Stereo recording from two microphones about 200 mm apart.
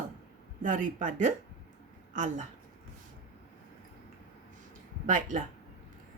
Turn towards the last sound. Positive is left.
turn(degrees=-40)  # may be behind; listen again after turning